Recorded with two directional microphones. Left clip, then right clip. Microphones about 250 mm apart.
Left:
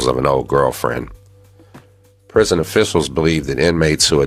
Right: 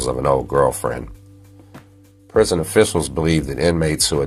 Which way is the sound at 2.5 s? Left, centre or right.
Left.